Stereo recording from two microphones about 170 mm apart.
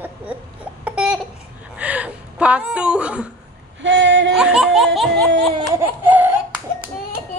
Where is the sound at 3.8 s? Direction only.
90° right.